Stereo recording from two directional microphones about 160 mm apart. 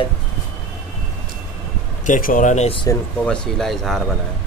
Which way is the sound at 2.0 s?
60° left (ahead or behind).